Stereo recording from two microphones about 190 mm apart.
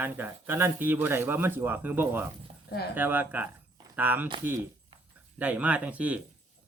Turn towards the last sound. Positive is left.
turn(degrees=-5)  # may be behind; listen again after turning